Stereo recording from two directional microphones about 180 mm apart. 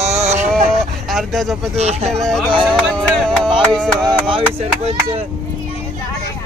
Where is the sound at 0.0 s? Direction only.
35° right (ahead or behind).